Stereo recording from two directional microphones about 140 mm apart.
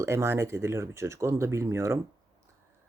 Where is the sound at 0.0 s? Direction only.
20° right (ahead or behind).